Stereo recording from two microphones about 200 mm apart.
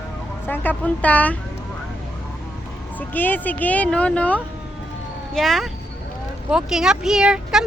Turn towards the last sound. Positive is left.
turn(degrees=-5)  # may be behind; listen again after turning